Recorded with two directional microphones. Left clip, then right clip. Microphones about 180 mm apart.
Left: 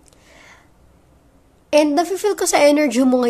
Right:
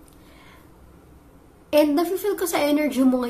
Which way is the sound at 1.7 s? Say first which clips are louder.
Left 4 dB; 35° left (ahead or behind).